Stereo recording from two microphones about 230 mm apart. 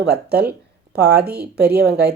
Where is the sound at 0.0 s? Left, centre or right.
Right.